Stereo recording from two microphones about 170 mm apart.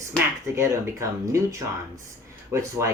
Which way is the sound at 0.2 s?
15° right (ahead or behind).